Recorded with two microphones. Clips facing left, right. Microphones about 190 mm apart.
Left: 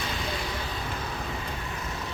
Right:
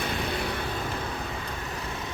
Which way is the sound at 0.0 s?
60° right (ahead or behind).